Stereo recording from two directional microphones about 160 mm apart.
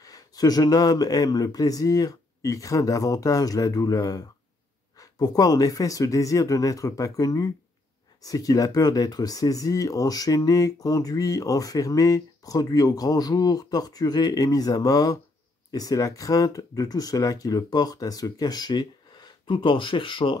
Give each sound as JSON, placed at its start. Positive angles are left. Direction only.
{"t": 0.0, "sound": "speech", "side_deg": 25}
{"t": 5.2, "sound": "speech", "side_deg": 25}